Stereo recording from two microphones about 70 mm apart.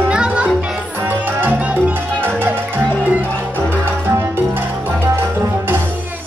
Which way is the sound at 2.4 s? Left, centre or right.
Right.